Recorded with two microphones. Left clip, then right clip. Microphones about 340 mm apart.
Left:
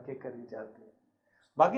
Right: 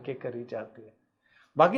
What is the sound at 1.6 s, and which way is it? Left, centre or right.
Speech, right.